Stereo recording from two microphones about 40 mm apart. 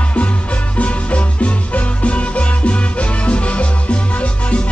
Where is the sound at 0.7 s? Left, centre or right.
Left.